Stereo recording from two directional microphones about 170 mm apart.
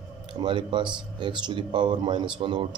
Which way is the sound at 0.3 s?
25° right (ahead or behind).